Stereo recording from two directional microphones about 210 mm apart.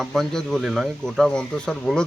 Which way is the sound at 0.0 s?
Centre (ahead or behind).